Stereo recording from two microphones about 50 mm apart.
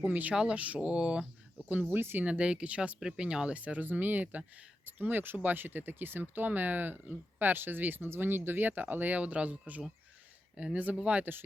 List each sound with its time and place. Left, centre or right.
0.0 s speech: right; by 1.3 s centre
1.9 s speech: right
2.2 s speech: right
3.0 s speech: centre
11.2 s speech: right